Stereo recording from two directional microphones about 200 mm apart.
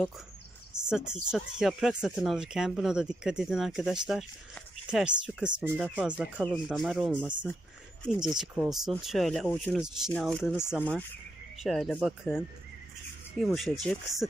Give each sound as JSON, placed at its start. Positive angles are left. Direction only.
{"t": 0.8, "sound": "speech", "side_deg": -5}
{"t": 13.6, "sound": "speech", "side_deg": 5}